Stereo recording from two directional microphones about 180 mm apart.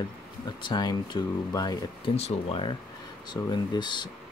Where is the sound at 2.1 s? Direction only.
35° left (ahead or behind).